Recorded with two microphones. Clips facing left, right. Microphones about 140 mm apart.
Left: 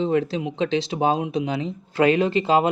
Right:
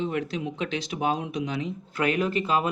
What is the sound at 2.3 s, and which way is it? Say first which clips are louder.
Speech: left 6 dB; 90° left.